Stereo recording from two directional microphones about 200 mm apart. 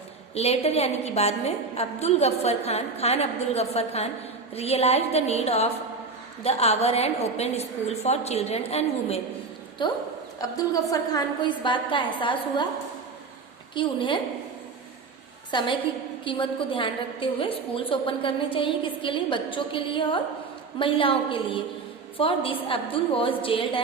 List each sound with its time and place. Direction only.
0.3 s a woman's voice: 30° left (ahead or behind)
13.7 s a woman's voice: 25° left (ahead or behind)
15.5 s a woman's voice: 25° left (ahead or behind)